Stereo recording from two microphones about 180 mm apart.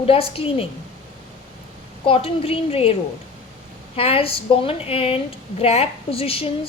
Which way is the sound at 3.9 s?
30° left (ahead or behind).